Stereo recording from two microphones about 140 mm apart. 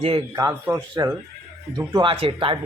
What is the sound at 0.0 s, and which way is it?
Speech, 40° right (ahead or behind).